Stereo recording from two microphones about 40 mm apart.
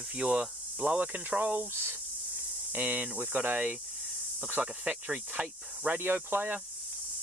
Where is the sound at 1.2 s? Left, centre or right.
Right.